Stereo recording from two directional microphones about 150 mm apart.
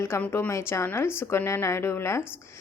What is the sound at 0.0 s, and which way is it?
A woman's voice, 15° left (ahead or behind).